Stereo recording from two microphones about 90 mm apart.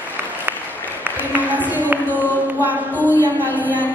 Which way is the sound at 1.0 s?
20° right (ahead or behind).